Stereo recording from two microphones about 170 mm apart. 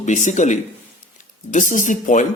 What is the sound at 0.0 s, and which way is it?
Speech, 45° left (ahead or behind).